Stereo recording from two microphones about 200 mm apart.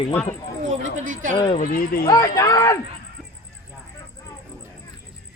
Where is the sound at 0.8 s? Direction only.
40° right (ahead or behind).